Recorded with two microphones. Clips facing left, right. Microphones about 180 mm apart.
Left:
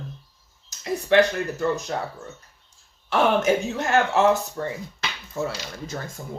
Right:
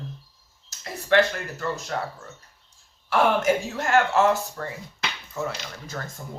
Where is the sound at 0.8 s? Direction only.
15° left (ahead or behind).